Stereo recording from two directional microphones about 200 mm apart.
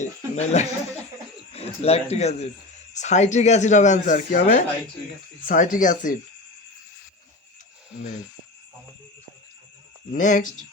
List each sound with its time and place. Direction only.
0.3 s speech: 35° left (ahead or behind)
10.1 s speech: 40° left (ahead or behind)